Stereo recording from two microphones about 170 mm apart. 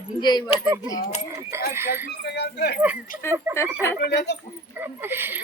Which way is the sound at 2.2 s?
75° left (ahead or behind).